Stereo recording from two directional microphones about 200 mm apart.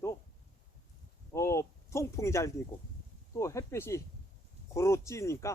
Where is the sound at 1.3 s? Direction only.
15° left (ahead or behind).